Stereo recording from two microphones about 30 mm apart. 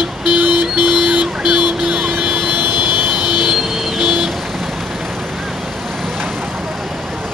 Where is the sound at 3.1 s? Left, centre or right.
Centre.